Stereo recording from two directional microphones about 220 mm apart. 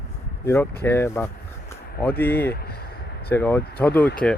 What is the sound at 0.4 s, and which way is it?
Speech, 10° left (ahead or behind).